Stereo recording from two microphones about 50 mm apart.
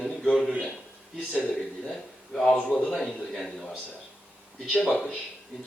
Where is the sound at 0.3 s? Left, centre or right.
Centre.